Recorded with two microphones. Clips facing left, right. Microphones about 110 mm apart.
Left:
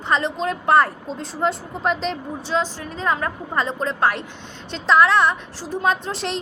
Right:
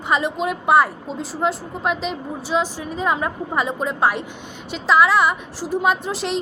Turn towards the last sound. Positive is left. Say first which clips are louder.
# right 1 dB
turn(degrees=0)  # may be behind; listen again after turning